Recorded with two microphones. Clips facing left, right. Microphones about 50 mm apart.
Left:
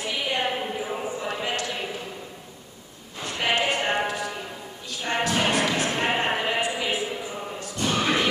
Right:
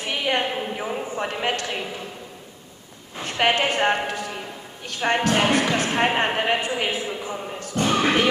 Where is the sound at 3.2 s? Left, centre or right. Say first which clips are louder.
Right 3 dB; right.